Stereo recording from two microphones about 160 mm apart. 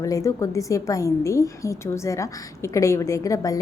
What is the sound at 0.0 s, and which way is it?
A woman's voice, 20° left (ahead or behind).